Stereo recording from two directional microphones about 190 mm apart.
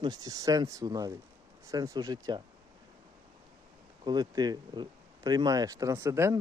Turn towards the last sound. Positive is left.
turn(degrees=-15)  # may be behind; listen again after turning